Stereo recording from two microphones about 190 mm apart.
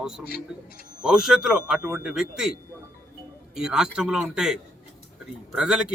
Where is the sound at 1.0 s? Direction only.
5° right (ahead or behind).